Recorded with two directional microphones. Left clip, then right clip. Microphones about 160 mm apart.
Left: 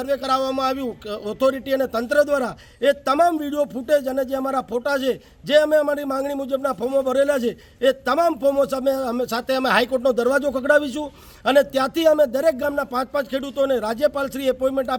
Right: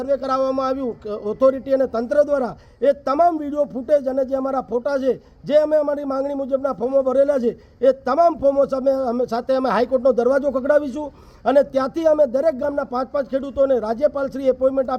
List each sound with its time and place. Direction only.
0.0 s a man's voice: 25° left (ahead or behind)